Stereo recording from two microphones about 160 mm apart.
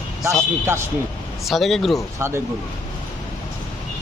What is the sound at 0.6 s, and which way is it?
Speech, 15° right (ahead or behind).